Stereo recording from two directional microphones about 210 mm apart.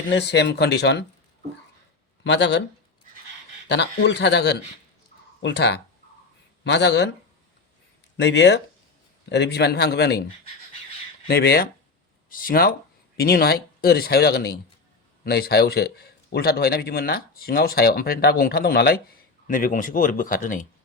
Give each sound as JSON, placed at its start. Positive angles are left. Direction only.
{"t": 0.1, "sound": "speech", "side_deg": 55}
{"t": 2.2, "sound": "speech", "side_deg": 55}
{"t": 3.7, "sound": "speech", "side_deg": 55}
{"t": 8.1, "sound": "a man's voice", "side_deg": 55}
{"t": 11.3, "sound": "a man's voice", "side_deg": 50}